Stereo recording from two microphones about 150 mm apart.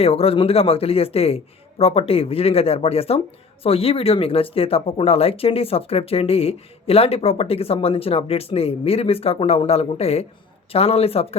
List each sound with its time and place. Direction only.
0.0 s speech: 40° left (ahead or behind)